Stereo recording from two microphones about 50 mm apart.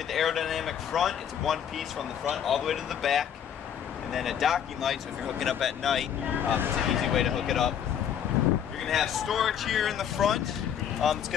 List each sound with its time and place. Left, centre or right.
0.1 s speech: centre
6.4 s speech: right
6.9 s speech: centre
8.8 s speech: centre